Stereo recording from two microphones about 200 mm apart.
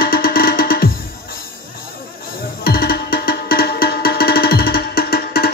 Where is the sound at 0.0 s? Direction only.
50° left (ahead or behind).